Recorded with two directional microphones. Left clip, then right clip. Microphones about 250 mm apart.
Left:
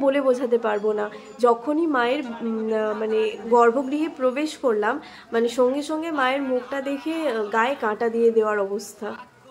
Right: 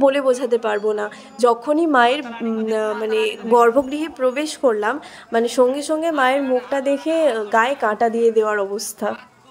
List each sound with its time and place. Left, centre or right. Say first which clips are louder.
0.0 s speech: right 4 dB; right